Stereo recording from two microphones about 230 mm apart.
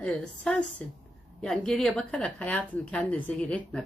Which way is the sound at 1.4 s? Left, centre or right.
Centre.